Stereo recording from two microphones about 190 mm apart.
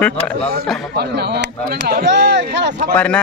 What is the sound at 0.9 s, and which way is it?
Speech, 60° right (ahead or behind).